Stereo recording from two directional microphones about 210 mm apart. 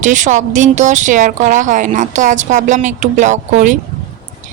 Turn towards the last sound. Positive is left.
turn(degrees=-35)  # may be behind; listen again after turning